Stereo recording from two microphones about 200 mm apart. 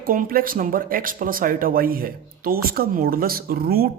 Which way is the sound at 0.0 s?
45° right (ahead or behind).